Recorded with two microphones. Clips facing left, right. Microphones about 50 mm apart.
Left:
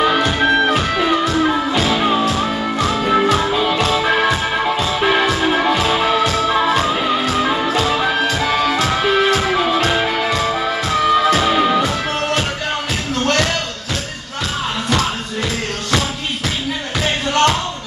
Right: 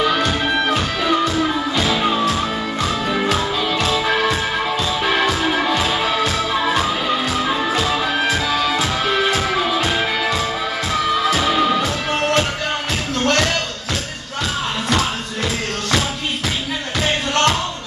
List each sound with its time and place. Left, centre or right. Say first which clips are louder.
0.0 s music: left 3 dB; centre
4.3 s music: left 2 dB; centre
6.6 s music: left 3 dB; centre
8.4 s music: left 2 dB; left
10.9 s music: left 4 dB; centre
13.2 s music: even; centre
17.0 s music: left 2 dB; centre